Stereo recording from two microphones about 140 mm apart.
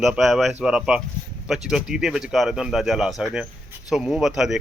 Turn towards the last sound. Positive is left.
turn(degrees=-5)  # may be behind; listen again after turning